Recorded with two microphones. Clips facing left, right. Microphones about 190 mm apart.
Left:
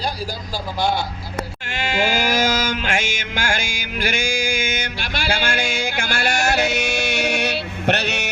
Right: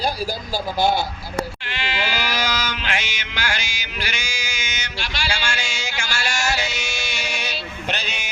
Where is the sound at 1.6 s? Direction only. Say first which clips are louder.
Left 5 dB; 45° left (ahead or behind).